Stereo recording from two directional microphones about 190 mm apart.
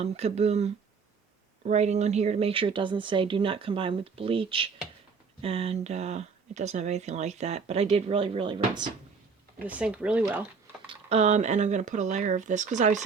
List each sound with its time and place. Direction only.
0.0 s a woman's voice: 35° right (ahead or behind)
9.6 s speech: 5° right (ahead or behind)
10.8 s speech: 35° right (ahead or behind)